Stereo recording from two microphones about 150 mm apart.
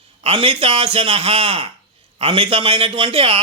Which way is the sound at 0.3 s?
35° right (ahead or behind).